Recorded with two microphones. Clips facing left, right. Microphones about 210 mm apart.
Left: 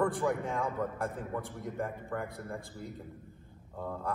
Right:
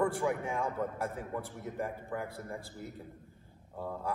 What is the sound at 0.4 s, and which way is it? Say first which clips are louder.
Speech: left 1 dB; 15° right (ahead or behind).